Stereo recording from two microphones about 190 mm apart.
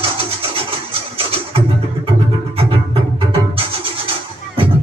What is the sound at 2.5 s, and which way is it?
Music, 30° right (ahead or behind).